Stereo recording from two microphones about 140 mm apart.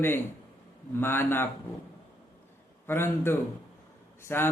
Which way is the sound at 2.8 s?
15° left (ahead or behind).